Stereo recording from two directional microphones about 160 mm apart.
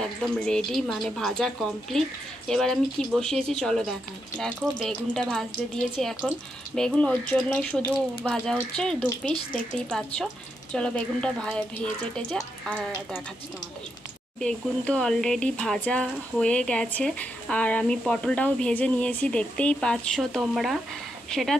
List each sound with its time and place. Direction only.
0.0 s a woman's voice: 5° left (ahead or behind)
9.2 s a woman's voice: 5° left (ahead or behind)
14.4 s speech: 5° left (ahead or behind)